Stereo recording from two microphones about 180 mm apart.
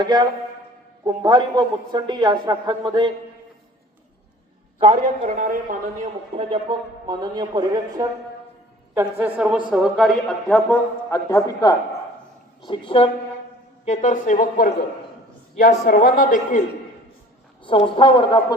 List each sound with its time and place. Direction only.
0.0 s a woman's voice: 20° right (ahead or behind)
4.8 s a man's voice: 40° right (ahead or behind)
6.0 s a woman's voice: 30° right (ahead or behind)
9.0 s a woman's voice: 10° right (ahead or behind); by 13.1 s 30° left (ahead or behind)
13.8 s a man's voice: 40° left (ahead or behind)
17.6 s speech: 30° left (ahead or behind)